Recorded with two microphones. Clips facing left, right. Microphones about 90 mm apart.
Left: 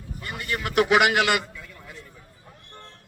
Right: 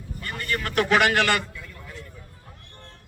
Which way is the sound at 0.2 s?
15° left (ahead or behind).